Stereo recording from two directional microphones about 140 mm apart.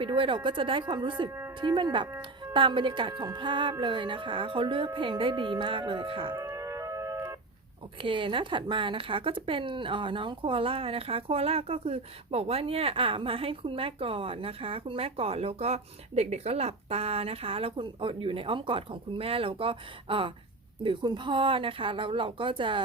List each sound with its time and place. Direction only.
0.0 s speech: 35° right (ahead or behind)
6.3 s a sound: 20° right (ahead or behind)
8.0 s speech: 40° right (ahead or behind)